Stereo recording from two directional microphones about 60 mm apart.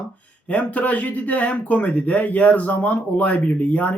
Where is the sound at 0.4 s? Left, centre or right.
Left.